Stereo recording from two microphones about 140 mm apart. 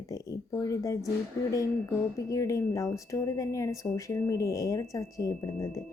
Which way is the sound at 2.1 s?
20° left (ahead or behind).